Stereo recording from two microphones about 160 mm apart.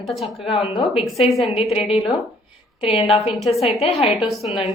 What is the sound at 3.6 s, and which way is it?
Speech, 40° left (ahead or behind).